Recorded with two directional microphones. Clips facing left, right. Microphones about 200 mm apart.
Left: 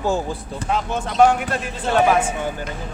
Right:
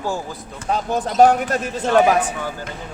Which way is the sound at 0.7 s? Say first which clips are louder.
Right 2 dB; 35° right (ahead or behind).